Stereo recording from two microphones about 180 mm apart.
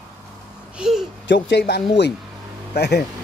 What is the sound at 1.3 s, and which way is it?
Speech, 75° left (ahead or behind).